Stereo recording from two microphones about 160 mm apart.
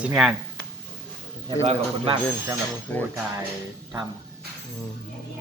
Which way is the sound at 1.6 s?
40° right (ahead or behind).